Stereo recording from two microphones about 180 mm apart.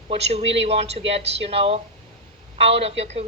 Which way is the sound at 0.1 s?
35° right (ahead or behind).